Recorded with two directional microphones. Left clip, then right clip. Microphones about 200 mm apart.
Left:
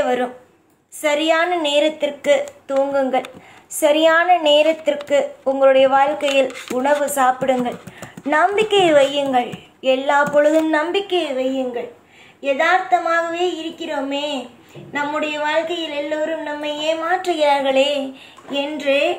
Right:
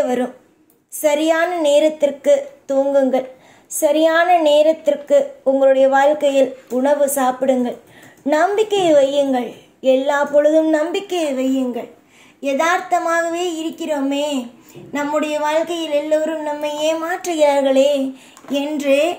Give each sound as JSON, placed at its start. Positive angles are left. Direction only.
{"t": 0.0, "sound": "a woman's voice", "side_deg": -40}
{"t": 18.5, "sound": "a woman's voice", "side_deg": -55}